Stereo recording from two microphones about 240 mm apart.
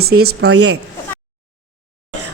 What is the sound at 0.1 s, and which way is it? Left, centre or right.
Speech, right.